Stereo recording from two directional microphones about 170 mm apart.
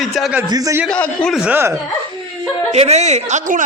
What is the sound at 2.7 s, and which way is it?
Speech, 40° right (ahead or behind).